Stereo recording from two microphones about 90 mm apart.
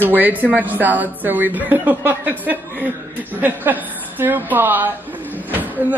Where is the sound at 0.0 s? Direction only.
20° right (ahead or behind).